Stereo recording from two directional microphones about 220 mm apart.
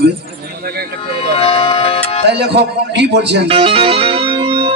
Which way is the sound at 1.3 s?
25° left (ahead or behind).